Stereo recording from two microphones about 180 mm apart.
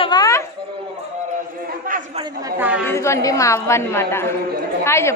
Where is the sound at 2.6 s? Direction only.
5° right (ahead or behind).